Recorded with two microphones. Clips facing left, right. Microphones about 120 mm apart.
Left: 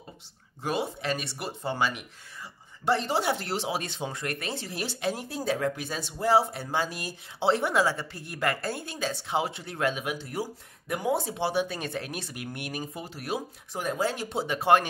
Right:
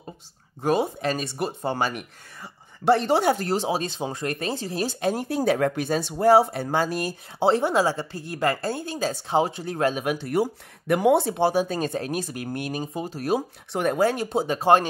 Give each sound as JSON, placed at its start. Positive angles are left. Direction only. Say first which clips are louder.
{"t": 0.6, "sound": "speech", "louder": "right 7 dB", "side_deg": -40}
{"t": 3.6, "sound": "speech", "louder": "right 5 dB", "side_deg": -30}
{"t": 10.0, "sound": "speech", "louder": "right 9 dB", "side_deg": -65}
{"t": 11.5, "sound": "speech", "louder": "right 5 dB", "side_deg": -40}
{"t": 13.7, "sound": "speech", "louder": "right 7 dB", "side_deg": -55}
{"t": 14.3, "sound": "speech", "louder": "right 1 dB", "side_deg": -35}